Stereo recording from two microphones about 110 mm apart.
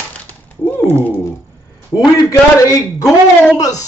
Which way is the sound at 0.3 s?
15° left (ahead or behind).